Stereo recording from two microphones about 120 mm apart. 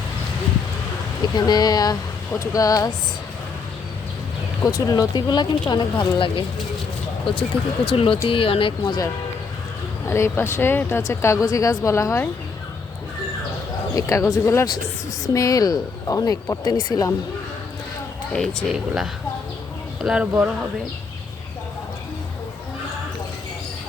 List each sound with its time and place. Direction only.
1.4 s speech: 35° left (ahead or behind)
4.9 s speech: 35° left (ahead or behind)
10.1 s speech: 20° left (ahead or behind)
13.9 s speech: 25° left (ahead or behind)
18.3 s speech: 5° left (ahead or behind)